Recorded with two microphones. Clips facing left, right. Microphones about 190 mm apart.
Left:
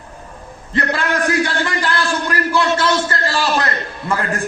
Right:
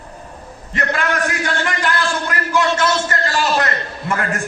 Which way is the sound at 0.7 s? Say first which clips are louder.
Left 1 dB; 35° left (ahead or behind).